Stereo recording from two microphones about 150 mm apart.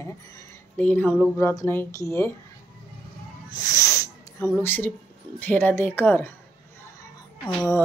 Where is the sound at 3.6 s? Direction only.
20° left (ahead or behind).